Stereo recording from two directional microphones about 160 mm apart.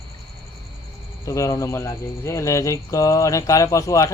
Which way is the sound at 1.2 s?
20° left (ahead or behind).